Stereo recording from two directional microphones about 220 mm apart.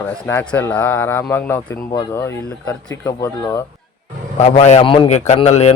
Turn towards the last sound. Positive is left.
turn(degrees=30)  # may be behind; listen again after turning